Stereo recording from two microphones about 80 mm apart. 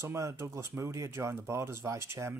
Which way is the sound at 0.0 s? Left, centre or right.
Right.